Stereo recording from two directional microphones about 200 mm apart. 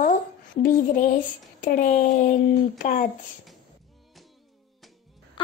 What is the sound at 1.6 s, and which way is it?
Child singing, 40° left (ahead or behind).